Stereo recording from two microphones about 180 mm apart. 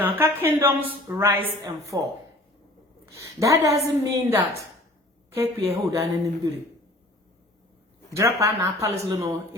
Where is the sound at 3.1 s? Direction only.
15° right (ahead or behind).